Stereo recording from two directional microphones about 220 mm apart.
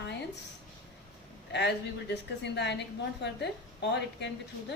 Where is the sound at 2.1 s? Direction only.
50° left (ahead or behind).